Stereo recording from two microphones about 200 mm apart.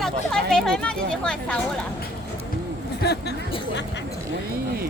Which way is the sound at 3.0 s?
55° left (ahead or behind).